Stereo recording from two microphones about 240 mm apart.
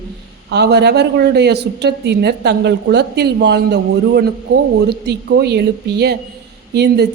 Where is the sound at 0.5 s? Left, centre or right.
Right.